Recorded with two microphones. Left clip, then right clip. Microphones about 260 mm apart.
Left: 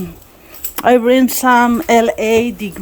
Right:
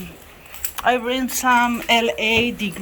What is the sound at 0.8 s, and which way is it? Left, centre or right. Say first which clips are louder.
Speech: left 9 dB; left.